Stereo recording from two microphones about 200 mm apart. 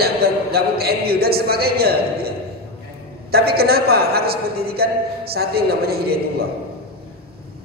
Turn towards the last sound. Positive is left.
turn(degrees=-50)  # may be behind; listen again after turning